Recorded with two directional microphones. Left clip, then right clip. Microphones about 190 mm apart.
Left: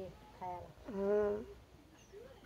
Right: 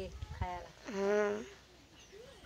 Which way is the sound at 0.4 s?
Centre (ahead or behind).